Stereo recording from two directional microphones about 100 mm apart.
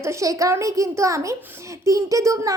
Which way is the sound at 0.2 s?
35° right (ahead or behind).